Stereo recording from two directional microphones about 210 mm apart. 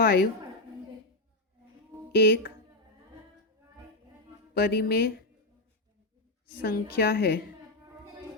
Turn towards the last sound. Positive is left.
turn(degrees=50)  # may be behind; listen again after turning